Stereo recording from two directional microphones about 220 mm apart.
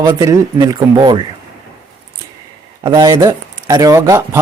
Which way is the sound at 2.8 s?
15° right (ahead or behind).